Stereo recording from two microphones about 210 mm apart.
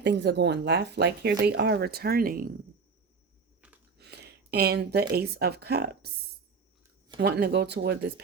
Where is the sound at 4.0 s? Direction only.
50° right (ahead or behind).